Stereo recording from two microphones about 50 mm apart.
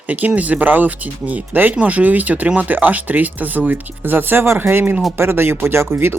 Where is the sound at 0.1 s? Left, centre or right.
Right.